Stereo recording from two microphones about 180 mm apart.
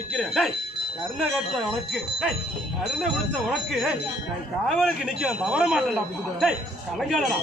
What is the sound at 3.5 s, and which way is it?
Speech, centre (ahead or behind).